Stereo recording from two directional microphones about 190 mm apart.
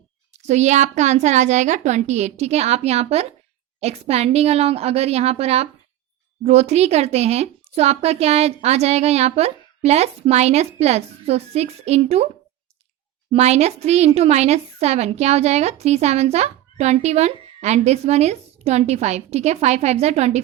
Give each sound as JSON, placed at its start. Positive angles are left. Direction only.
{"t": 0.3, "sound": "a woman's voice", "side_deg": -35}
{"t": 13.3, "sound": "a woman's voice", "side_deg": -35}